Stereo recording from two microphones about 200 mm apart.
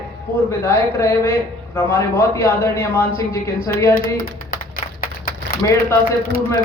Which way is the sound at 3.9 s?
45° left (ahead or behind).